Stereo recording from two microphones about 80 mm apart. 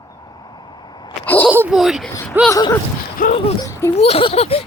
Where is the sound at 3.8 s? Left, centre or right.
Left.